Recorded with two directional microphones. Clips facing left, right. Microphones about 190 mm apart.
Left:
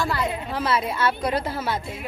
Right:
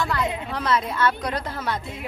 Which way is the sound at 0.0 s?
Centre (ahead or behind).